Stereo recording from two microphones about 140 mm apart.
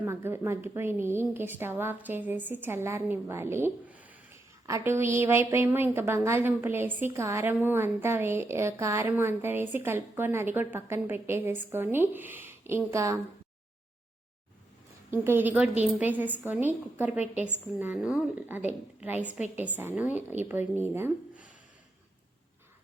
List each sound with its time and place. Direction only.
0.0 s a woman's voice: 15° right (ahead or behind)
15.1 s a woman's voice: 15° right (ahead or behind)